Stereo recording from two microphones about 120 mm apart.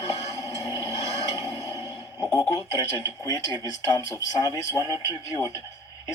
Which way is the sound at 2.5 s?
30° left (ahead or behind).